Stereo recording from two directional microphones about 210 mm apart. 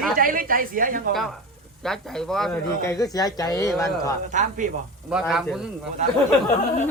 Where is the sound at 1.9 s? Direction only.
Centre (ahead or behind).